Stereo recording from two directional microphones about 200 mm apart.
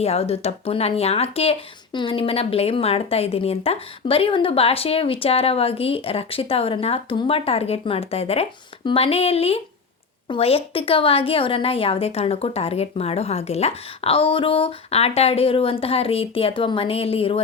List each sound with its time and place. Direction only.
0.0 s speech: 30° left (ahead or behind)